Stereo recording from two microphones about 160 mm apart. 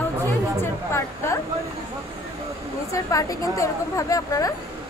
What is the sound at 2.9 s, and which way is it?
A woman's voice, 20° left (ahead or behind).